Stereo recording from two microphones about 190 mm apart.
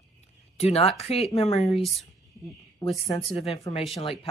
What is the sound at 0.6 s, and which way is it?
Speech, 30° left (ahead or behind).